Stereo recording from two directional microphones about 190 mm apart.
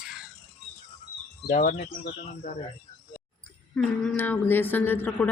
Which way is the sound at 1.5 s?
45° left (ahead or behind).